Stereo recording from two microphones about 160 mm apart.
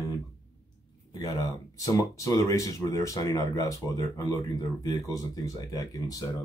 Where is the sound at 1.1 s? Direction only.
25° left (ahead or behind).